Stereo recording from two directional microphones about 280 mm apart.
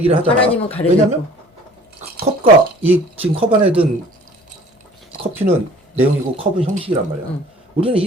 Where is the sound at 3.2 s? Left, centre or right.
Centre.